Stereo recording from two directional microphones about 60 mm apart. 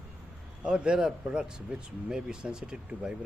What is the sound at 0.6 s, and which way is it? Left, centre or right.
Speech, centre.